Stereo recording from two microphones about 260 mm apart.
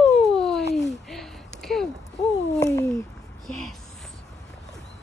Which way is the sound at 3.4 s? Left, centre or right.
Centre.